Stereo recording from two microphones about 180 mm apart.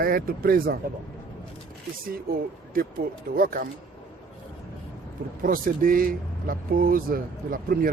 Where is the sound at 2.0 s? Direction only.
55° right (ahead or behind).